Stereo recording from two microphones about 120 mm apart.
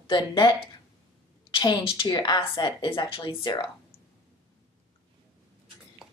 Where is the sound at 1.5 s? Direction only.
40° left (ahead or behind).